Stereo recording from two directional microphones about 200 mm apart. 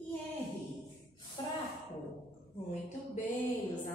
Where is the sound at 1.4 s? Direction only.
20° left (ahead or behind).